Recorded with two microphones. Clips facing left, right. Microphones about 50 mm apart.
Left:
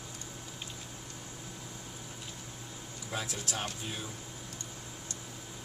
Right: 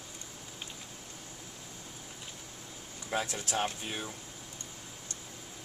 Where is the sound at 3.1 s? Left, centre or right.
Right.